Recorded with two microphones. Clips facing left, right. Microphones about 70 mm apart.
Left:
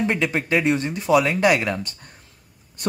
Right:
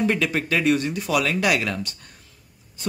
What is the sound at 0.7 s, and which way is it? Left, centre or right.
Speech, left.